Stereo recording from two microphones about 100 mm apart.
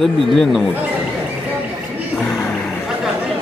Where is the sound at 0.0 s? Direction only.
Centre (ahead or behind).